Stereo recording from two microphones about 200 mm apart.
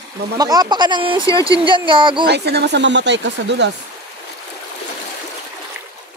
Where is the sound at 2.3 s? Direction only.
55° right (ahead or behind).